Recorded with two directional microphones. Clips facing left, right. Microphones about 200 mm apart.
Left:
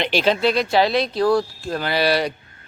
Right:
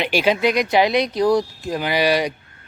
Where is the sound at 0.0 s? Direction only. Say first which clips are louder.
Right 1 dB; 10° right (ahead or behind).